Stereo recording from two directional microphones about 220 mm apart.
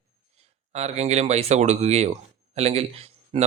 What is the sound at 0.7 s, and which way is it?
Speech, 30° right (ahead or behind).